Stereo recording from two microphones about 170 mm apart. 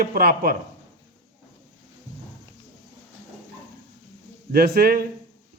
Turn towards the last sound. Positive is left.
turn(degrees=-65)  # may be behind; listen again after turning